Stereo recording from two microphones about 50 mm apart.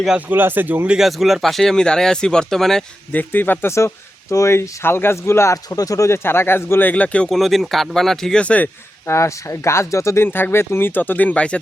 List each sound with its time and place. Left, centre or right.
0.3 s speech: right
0.9 s speech: centre
1.7 s speech: centre
3.1 s speech: left
3.7 s speech: left
5.1 s speech: left
6.2 s speech: left
6.9 s speech: left
7.3 s speech: centre
8.4 s speech: left
9.0 s speech: left
10.2 s speech: left